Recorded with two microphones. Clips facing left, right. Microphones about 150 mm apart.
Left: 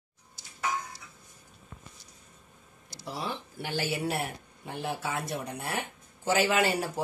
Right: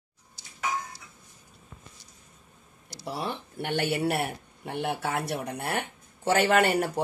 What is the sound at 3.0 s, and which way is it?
Speech, 65° right (ahead or behind).